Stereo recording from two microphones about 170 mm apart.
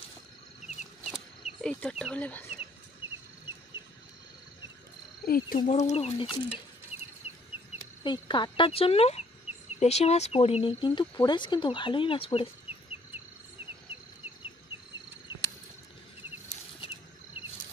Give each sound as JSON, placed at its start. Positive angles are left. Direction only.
{"t": 1.1, "sound": "cricket", "side_deg": 0}
{"t": 5.2, "sound": "frog", "side_deg": 60}
{"t": 5.7, "sound": "speech", "side_deg": 40}
{"t": 8.0, "sound": "speech", "side_deg": 25}